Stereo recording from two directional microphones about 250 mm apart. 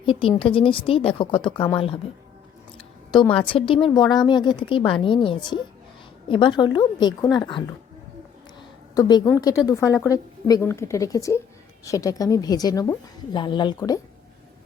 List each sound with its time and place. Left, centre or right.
0.0 s speech: left
3.1 s a woman's voice: centre
9.0 s a woman's voice: centre